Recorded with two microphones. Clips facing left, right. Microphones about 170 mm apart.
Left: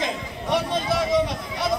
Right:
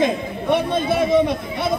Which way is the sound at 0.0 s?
55° right (ahead or behind).